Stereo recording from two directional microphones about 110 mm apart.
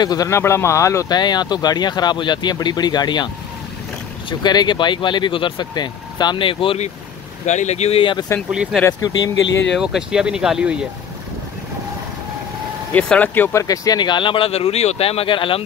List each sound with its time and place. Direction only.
0.0 s speech: 35° left (ahead or behind)
0.4 s speech: 25° left (ahead or behind)
1.0 s speech: 40° left (ahead or behind)
4.3 s speech: 40° left (ahead or behind)
7.4 s speech: 90° left
8.0 s speech: 45° left (ahead or behind)
8.7 s speech: 5° right (ahead or behind)
12.9 s speech: 15° left (ahead or behind)
13.5 s speech: 30° left (ahead or behind); by 15.6 s 50° left (ahead or behind)